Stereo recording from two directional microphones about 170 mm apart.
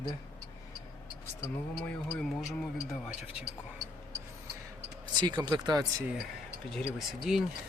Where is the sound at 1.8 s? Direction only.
5° left (ahead or behind).